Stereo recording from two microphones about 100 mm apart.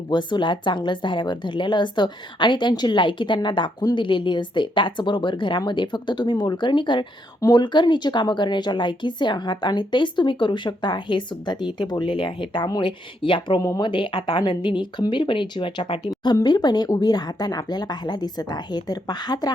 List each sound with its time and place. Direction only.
0.1 s a woman's voice: 50° left (ahead or behind)
13.6 s speech: 35° left (ahead or behind)
13.8 s a woman's voice: 55° left (ahead or behind)
16.0 s a woman's voice: 45° left (ahead or behind)